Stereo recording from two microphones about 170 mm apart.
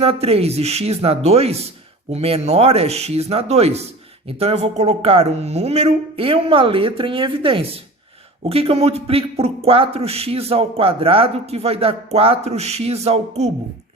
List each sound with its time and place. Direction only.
0.0 s a man's voice: 35° right (ahead or behind)